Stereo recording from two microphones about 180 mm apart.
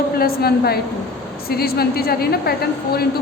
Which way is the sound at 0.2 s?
60° left (ahead or behind).